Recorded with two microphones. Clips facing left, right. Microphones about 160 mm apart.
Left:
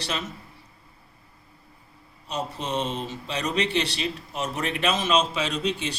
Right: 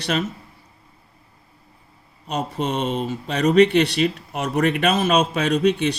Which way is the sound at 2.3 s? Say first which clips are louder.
Right 5 dB; 60° right (ahead or behind).